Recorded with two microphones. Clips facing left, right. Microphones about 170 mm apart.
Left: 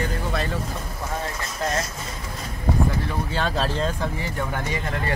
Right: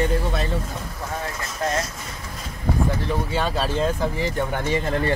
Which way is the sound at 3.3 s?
5° right (ahead or behind).